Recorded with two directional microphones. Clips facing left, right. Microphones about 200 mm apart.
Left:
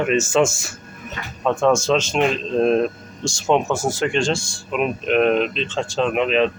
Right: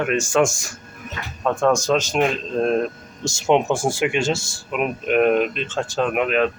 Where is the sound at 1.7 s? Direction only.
15° right (ahead or behind).